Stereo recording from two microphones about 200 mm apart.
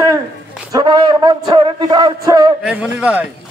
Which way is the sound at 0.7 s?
20° right (ahead or behind).